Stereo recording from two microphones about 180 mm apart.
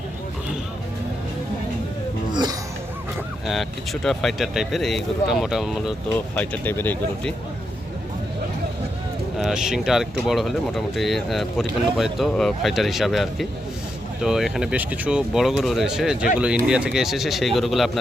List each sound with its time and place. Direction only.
2.3 s a sound: 25° right (ahead or behind)
3.4 s speech: centre (ahead or behind)
9.4 s speech: centre (ahead or behind)